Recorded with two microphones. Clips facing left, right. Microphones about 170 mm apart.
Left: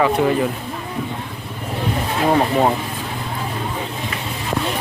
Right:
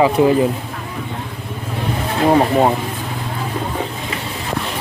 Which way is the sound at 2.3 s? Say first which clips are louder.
Right 2 dB; 20° right (ahead or behind).